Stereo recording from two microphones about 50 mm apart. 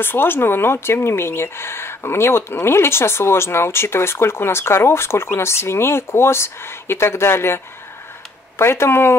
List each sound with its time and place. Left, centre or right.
0.0 s speech: left